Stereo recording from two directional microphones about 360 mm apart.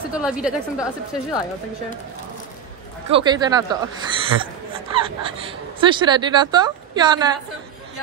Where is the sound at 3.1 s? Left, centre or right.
Centre.